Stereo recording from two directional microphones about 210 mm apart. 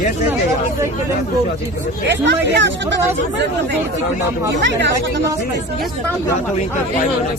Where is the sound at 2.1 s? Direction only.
55° right (ahead or behind).